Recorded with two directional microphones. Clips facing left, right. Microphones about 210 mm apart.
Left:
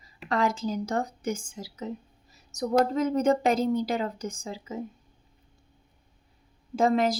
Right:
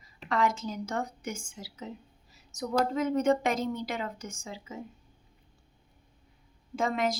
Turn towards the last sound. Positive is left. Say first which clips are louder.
# left 6 dB
turn(degrees=35)  # may be behind; listen again after turning